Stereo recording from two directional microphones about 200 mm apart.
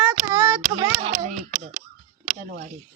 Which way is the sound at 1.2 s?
40° right (ahead or behind).